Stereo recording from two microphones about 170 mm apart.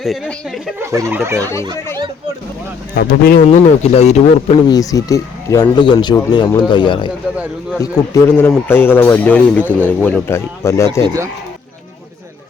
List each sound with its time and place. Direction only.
0.0 s speech: centre (ahead or behind)
0.8 s speech: 15° right (ahead or behind)
1.4 s speech: 15° left (ahead or behind)
2.9 s speech: 60° left (ahead or behind)
3.9 s speech: 40° left (ahead or behind)
4.7 s speech: 20° left (ahead or behind)
11.0 s speech: 20° right (ahead or behind)